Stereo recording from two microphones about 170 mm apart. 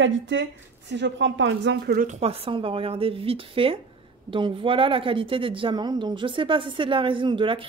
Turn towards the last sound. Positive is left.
turn(degrees=-30)  # may be behind; listen again after turning